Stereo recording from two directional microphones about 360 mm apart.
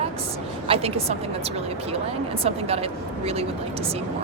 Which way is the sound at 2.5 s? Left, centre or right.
Centre.